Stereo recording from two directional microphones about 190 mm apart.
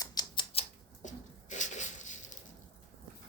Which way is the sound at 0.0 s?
20° left (ahead or behind).